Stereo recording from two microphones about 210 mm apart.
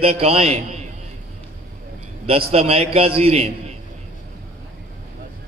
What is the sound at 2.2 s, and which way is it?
A man's voice, 30° right (ahead or behind).